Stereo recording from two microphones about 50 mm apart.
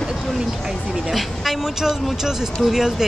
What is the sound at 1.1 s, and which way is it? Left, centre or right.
Speech, centre.